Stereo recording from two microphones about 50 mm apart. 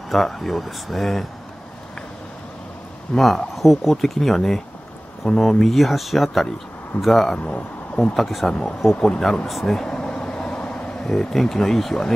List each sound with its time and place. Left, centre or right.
0.1 s speech: centre
3.1 s speech: centre
3.5 s speech: centre
7.3 s speech: left
8.1 s speech: centre
9.0 s speech: centre
9.5 s speech: centre
9.8 s vehicle: centre